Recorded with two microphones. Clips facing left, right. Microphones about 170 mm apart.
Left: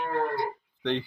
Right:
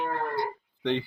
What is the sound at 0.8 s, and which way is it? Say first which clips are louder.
Speech: right 1 dB; 10° right (ahead or behind).